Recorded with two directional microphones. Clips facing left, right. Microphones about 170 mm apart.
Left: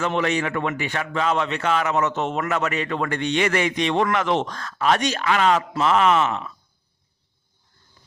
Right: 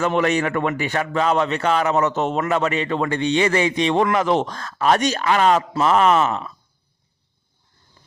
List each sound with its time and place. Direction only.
0.0 s a man's voice: 45° right (ahead or behind)